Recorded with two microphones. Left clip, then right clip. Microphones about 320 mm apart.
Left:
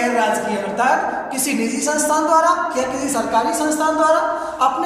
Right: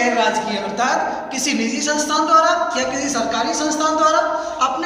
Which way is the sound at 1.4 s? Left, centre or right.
Centre.